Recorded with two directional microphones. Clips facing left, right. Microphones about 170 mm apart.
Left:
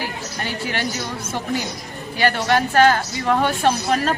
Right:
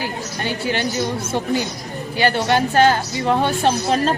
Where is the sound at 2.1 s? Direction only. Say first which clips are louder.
Right 1 dB; 30° right (ahead or behind).